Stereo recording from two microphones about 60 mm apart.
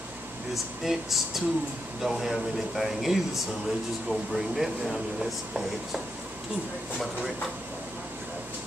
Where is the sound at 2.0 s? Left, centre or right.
Centre.